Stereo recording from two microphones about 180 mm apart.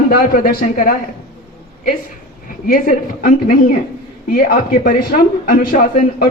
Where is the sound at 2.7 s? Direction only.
50° left (ahead or behind).